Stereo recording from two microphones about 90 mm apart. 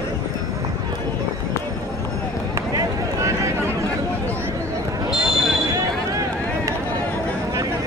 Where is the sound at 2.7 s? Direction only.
35° right (ahead or behind).